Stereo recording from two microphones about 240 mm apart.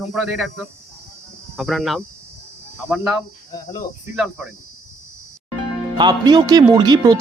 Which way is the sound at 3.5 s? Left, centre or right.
Centre.